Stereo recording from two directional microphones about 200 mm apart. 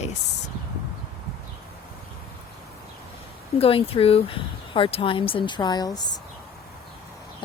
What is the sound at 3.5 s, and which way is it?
Speech, 30° left (ahead or behind).